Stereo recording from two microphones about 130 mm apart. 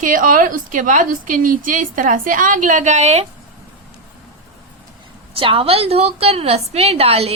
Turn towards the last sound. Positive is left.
turn(degrees=-50)  # may be behind; listen again after turning